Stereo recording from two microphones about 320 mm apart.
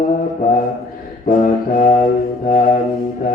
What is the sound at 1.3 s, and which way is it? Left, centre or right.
Mantra, left.